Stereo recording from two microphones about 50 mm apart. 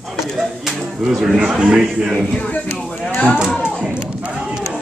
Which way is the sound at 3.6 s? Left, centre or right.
Right.